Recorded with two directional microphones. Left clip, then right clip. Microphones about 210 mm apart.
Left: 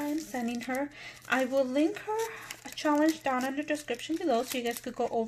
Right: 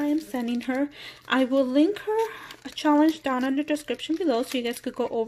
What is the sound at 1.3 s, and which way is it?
Speech, 35° right (ahead or behind).